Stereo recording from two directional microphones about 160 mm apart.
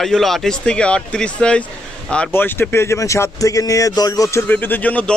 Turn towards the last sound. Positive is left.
turn(degrees=10)  # may be behind; listen again after turning